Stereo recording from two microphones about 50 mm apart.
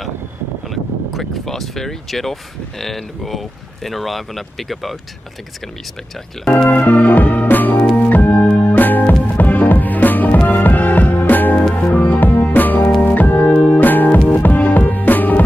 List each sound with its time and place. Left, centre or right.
0.7 s speech: centre
6.7 s music: left